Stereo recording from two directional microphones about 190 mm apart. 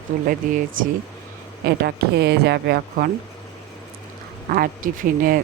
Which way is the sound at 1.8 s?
60° right (ahead or behind).